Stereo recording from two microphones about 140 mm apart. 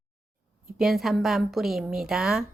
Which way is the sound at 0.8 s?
Centre (ahead or behind).